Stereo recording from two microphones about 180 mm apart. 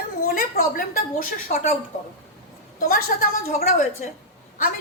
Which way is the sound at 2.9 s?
55° left (ahead or behind).